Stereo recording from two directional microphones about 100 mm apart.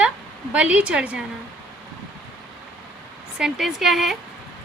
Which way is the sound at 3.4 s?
5° right (ahead or behind).